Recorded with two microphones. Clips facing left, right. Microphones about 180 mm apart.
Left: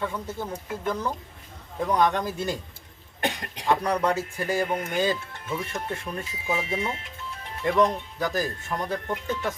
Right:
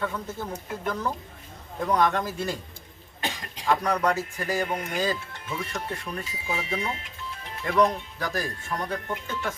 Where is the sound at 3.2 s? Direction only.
60° left (ahead or behind).